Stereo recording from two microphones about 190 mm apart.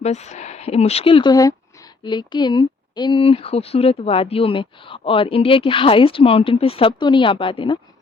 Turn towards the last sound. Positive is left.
turn(degrees=25)  # may be behind; listen again after turning